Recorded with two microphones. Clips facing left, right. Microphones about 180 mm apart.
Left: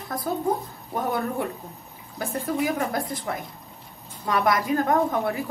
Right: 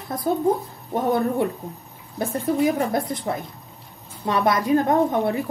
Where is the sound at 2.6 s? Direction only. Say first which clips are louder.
Right 5 dB; 35° right (ahead or behind).